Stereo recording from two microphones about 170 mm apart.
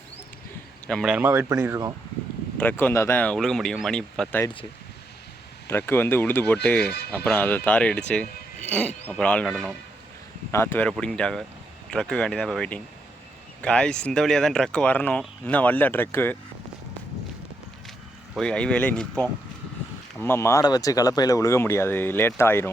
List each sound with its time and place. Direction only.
0.9 s speech: 5° left (ahead or behind)
1.1 s speech: 15° right (ahead or behind)
2.6 s speech: 10° left (ahead or behind)
5.6 s speech: 15° left (ahead or behind)
10.5 s speech: 15° left (ahead or behind)
18.3 s speech: 5° left (ahead or behind)